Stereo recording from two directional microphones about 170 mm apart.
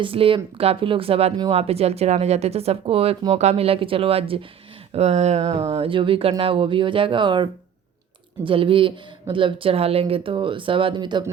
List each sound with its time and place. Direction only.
0.0 s speech: 30° right (ahead or behind)